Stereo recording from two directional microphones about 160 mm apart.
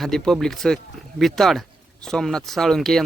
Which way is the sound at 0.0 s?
Centre (ahead or behind).